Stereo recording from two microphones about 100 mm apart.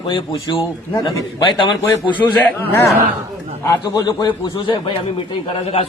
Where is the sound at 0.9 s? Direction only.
50° left (ahead or behind).